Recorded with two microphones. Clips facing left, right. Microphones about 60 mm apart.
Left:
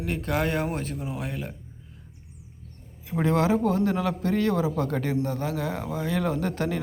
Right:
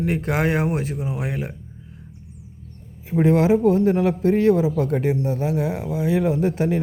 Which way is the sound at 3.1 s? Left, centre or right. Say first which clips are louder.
Right 6 dB; centre.